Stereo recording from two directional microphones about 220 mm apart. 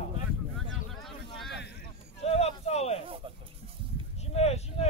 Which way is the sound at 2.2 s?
30° left (ahead or behind).